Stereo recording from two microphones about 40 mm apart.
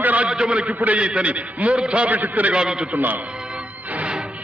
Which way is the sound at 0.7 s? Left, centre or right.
Right.